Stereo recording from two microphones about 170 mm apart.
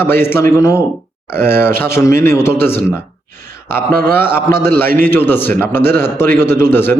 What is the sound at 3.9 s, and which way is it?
Speech, 65° right (ahead or behind).